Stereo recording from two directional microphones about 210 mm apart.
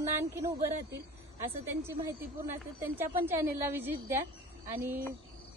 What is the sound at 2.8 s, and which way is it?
A woman's voice, 10° right (ahead or behind).